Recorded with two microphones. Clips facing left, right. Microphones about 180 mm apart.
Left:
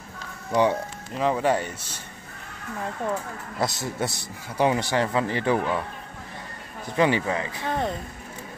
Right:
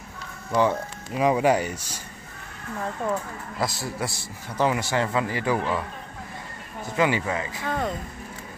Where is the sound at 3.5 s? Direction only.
20° left (ahead or behind).